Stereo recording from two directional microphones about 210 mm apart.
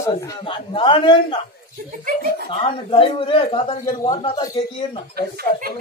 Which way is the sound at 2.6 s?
25° left (ahead or behind).